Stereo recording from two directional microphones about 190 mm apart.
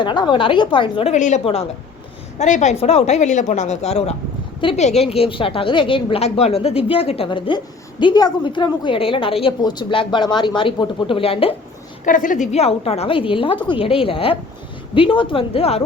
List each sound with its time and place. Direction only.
0.0 s a woman's voice: 25° left (ahead or behind)
12.0 s a woman's voice: 45° left (ahead or behind)